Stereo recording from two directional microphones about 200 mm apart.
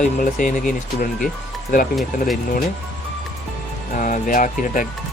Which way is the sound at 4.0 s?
40° left (ahead or behind).